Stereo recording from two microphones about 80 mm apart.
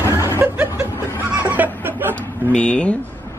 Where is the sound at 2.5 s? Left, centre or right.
Centre.